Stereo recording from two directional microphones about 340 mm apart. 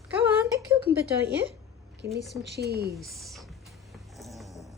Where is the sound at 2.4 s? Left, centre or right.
Right.